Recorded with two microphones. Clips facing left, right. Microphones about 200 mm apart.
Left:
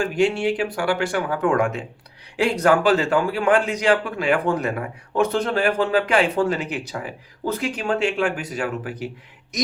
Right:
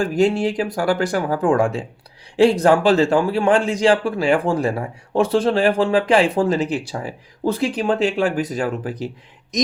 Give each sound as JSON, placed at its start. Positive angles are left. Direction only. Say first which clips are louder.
{"t": 0.0, "sound": "a man's voice", "louder": "right 3 dB", "side_deg": -35}